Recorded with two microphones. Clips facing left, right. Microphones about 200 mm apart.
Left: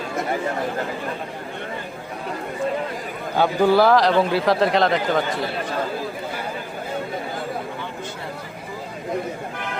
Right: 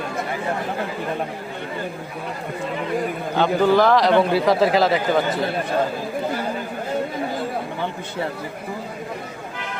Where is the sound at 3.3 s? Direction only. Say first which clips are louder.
Even; 10° left (ahead or behind).